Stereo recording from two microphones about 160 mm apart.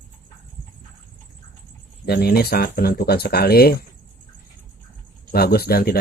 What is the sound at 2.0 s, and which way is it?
Speech, 80° left.